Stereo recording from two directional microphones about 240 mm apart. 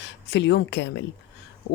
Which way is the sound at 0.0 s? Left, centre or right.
Left.